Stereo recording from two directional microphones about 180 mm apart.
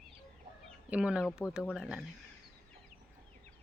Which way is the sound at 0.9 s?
5° right (ahead or behind).